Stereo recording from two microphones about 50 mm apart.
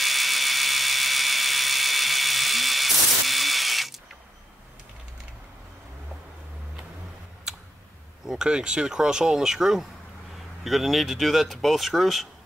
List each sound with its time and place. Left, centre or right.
0.0 s a sound: centre
7.5 s tick: centre
8.3 s speech: centre